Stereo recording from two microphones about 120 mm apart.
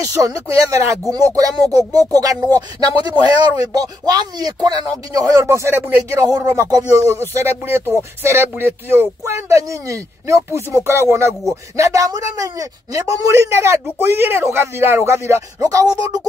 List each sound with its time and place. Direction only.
0.0 s speech: 30° right (ahead or behind)